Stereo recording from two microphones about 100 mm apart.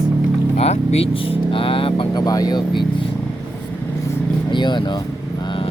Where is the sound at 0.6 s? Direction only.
90° left; by 2.0 s 60° left (ahead or behind).